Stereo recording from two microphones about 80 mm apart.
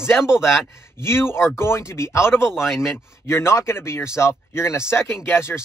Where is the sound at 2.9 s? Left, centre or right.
Left.